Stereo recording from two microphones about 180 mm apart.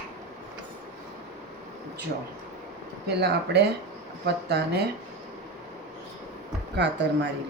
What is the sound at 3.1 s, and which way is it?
Speech, 65° right (ahead or behind).